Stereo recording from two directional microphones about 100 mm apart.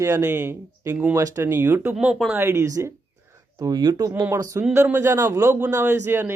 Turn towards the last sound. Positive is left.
turn(degrees=-30)  # may be behind; listen again after turning